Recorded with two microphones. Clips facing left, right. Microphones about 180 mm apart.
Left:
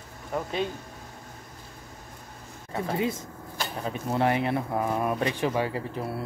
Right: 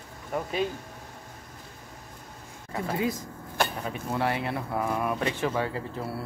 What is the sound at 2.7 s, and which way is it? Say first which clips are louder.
Speech: left 1 dB; 25° left (ahead or behind).